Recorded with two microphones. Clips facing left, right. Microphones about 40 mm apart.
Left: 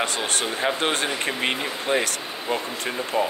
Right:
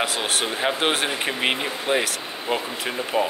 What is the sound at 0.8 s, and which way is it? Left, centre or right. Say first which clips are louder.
Speech: right 1 dB; centre.